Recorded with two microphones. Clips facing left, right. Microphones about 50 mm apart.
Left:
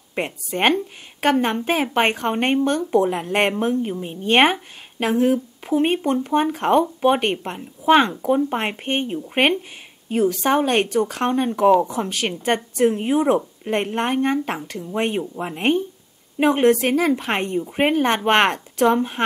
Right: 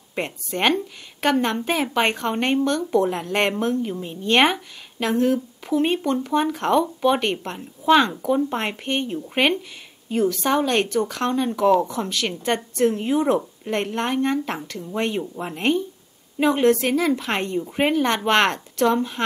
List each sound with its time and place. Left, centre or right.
0.1 s speech: centre
3.5 s speech: centre
11.7 s speech: centre
15.3 s speech: centre
16.3 s a woman's voice: left